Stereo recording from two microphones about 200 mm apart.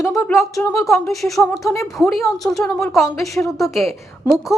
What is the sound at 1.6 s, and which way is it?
Speech, 15° left (ahead or behind).